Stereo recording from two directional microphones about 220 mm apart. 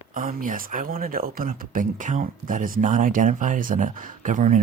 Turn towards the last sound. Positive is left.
turn(degrees=-35)  # may be behind; listen again after turning